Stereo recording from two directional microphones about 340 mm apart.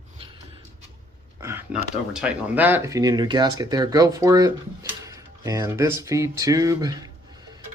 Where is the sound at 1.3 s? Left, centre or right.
Centre.